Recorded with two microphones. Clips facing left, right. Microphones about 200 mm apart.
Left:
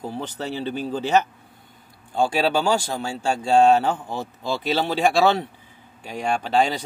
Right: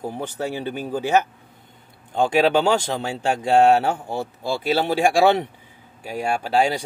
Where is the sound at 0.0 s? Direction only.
15° right (ahead or behind).